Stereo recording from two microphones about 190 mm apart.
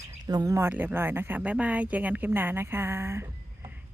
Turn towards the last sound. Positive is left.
turn(degrees=-15)  # may be behind; listen again after turning